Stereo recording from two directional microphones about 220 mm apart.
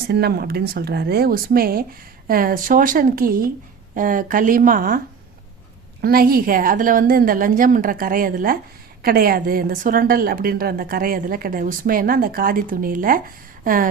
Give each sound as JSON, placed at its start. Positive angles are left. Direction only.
{"t": 0.1, "sound": "a woman's voice", "side_deg": -45}
{"t": 6.0, "sound": "a woman's voice", "side_deg": -40}